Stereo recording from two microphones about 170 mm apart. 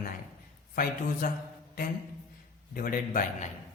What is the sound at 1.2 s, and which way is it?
Mantra, 50° left (ahead or behind).